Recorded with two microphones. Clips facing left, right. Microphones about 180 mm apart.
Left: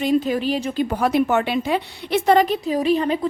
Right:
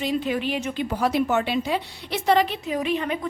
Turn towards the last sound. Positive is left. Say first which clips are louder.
# left 6 dB
turn(degrees=35)  # may be behind; listen again after turning